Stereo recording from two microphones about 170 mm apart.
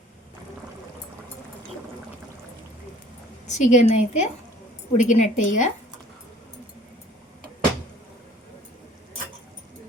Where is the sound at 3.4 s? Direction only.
45° left (ahead or behind).